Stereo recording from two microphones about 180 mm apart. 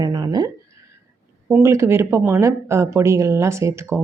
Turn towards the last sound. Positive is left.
turn(degrees=-15)  # may be behind; listen again after turning